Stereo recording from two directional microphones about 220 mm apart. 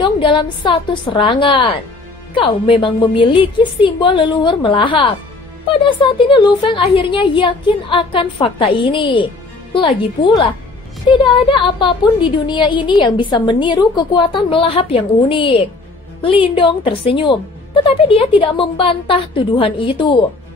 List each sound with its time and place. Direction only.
0.0 s a woman's voice: 20° left (ahead or behind)